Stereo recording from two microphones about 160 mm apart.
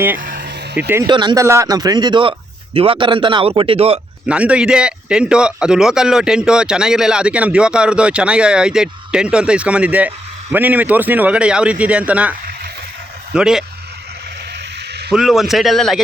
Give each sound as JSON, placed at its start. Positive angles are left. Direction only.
{"t": 0.2, "sound": "vehicle", "side_deg": -75}
{"t": 0.8, "sound": "speech", "side_deg": -10}
{"t": 1.0, "sound": "a man's voice", "side_deg": -30}
{"t": 4.3, "sound": "a man's voice", "side_deg": -5}
{"t": 15.1, "sound": "a man's voice", "side_deg": 0}